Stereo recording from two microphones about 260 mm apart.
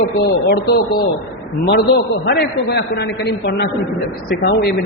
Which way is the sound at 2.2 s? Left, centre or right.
Left.